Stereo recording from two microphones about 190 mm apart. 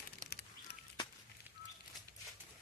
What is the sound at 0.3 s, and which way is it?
Bird, 60° left (ahead or behind).